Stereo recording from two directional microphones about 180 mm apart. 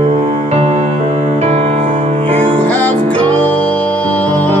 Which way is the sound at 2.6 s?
10° left (ahead or behind).